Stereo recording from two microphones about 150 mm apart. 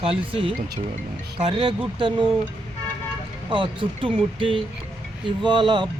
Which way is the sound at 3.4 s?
35° right (ahead or behind).